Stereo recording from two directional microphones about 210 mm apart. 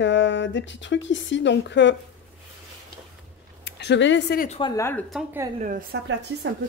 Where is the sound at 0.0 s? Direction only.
60° left (ahead or behind).